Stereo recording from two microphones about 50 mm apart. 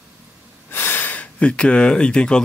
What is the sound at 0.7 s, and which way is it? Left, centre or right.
Snort, left.